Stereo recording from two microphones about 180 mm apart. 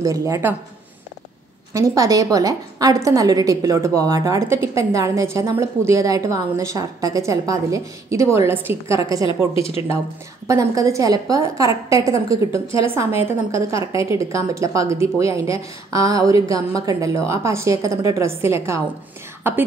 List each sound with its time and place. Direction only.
0.0 s a woman's voice: 20° right (ahead or behind)
1.7 s a woman's voice: 20° right (ahead or behind)
9.5 s a woman's voice: 30° left (ahead or behind)
10.4 s a woman's voice: 15° right (ahead or behind)